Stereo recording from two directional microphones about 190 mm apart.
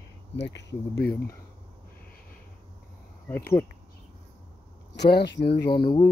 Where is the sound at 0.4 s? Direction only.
65° left (ahead or behind).